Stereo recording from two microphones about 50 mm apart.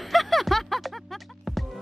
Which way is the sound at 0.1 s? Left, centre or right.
Centre.